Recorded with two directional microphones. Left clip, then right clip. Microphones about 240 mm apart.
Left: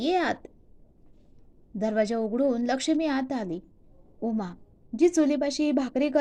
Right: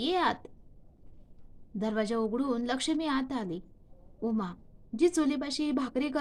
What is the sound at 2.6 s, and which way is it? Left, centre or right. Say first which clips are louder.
Speech: left 5 dB; centre.